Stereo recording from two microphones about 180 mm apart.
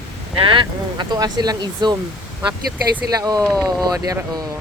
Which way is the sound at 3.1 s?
20° right (ahead or behind).